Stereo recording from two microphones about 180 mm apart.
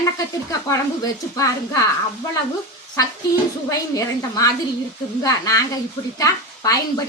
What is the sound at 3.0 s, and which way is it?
A woman's voice, 20° left (ahead or behind).